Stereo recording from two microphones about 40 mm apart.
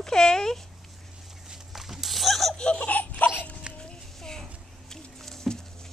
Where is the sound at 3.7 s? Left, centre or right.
Right.